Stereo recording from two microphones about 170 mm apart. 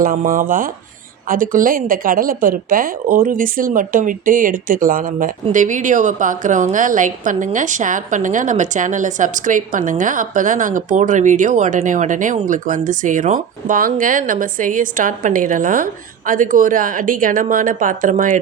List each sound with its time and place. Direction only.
0.0 s a woman's voice: 55° right (ahead or behind)